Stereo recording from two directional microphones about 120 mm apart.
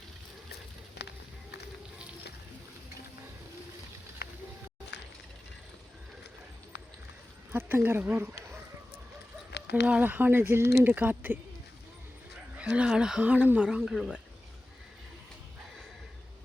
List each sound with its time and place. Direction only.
7.5 s speech: 20° right (ahead or behind)
9.8 s speech: 15° right (ahead or behind)
12.5 s speech: 10° right (ahead or behind)